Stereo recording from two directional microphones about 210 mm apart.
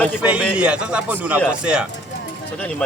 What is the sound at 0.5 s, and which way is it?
Speech, 5° right (ahead or behind).